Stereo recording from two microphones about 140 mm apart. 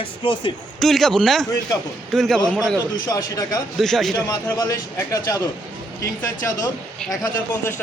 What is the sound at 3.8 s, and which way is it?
Speech, centre (ahead or behind).